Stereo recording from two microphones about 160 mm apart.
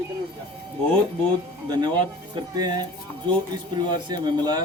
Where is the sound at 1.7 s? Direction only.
25° right (ahead or behind).